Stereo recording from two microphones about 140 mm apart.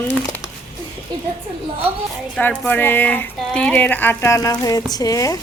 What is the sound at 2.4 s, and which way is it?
Speech, 15° left (ahead or behind).